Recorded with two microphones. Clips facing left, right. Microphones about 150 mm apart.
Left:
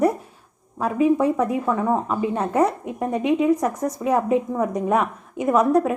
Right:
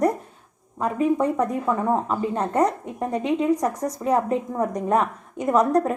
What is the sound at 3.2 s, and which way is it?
Speech, 30° right (ahead or behind).